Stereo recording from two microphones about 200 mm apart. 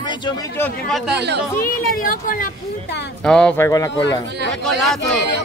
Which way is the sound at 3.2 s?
5° left (ahead or behind).